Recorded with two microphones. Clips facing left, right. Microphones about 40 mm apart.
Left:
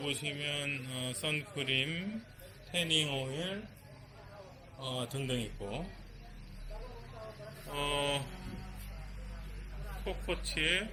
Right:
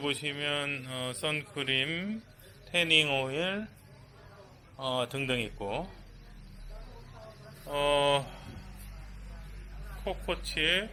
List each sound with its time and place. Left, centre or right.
0.0 s speech: centre
2.9 s speech: right
4.8 s speech: right
6.8 s vehicle: centre
7.6 s speech: centre
8.3 s music: centre
9.7 s a sound: centre
10.2 s speech: centre